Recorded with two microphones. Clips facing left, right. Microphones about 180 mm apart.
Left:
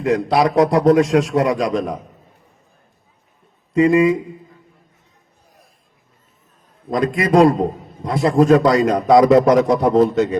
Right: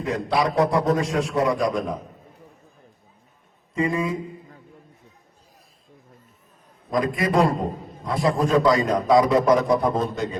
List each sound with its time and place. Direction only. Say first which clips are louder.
0.0 s a man's voice: left 7 dB; 75° left (ahead or behind)
3.8 s speech: left 10 dB; 85° left
6.9 s a man's voice: left 6 dB; 80° left